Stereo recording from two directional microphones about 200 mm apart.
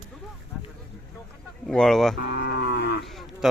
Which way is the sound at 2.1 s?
55° left (ahead or behind).